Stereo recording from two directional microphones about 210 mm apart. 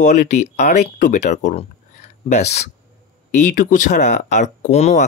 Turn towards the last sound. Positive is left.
turn(degrees=30)  # may be behind; listen again after turning